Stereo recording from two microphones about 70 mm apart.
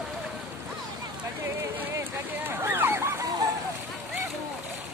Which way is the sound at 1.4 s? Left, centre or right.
Right.